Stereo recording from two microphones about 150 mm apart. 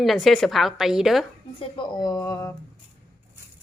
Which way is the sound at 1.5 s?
30° left (ahead or behind).